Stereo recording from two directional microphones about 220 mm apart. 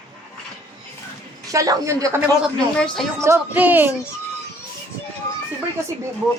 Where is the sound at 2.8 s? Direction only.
5° left (ahead or behind).